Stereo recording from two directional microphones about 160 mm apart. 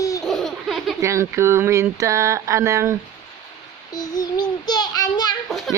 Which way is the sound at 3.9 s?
25° left (ahead or behind).